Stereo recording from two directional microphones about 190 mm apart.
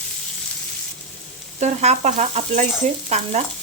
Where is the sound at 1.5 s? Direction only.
35° right (ahead or behind).